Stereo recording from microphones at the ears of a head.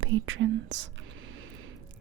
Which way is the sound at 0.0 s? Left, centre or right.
Right.